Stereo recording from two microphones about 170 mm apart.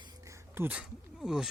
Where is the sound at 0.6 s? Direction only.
15° right (ahead or behind).